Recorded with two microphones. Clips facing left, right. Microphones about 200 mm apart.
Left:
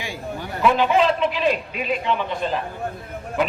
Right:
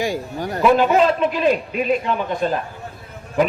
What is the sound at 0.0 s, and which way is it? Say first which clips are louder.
A man's voice: right 7 dB; 40° right (ahead or behind).